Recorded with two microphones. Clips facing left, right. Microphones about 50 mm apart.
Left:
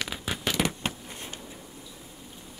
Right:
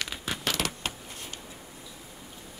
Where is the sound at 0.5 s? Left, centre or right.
Centre.